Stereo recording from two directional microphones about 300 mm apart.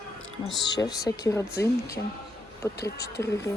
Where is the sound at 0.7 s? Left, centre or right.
Centre.